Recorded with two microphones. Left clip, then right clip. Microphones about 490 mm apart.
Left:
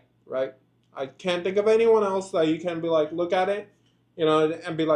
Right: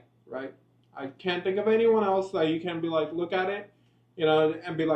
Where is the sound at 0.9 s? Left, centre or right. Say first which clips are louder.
Left 4 dB; left.